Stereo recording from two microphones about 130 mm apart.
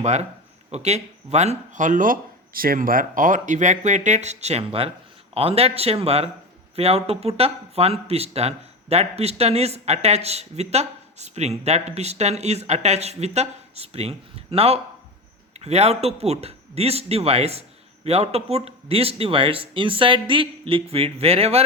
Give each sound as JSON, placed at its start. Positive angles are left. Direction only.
{"t": 0.0, "sound": "speech", "side_deg": -60}